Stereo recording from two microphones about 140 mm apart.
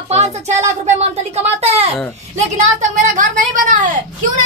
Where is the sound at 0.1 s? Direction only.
55° right (ahead or behind).